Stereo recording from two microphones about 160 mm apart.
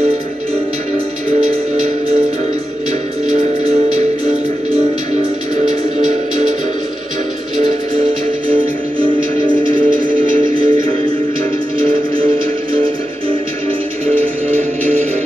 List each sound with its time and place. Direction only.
9.5 s music: 30° right (ahead or behind)